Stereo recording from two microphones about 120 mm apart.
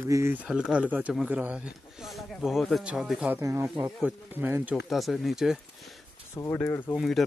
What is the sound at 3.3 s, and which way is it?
Speech, 20° right (ahead or behind).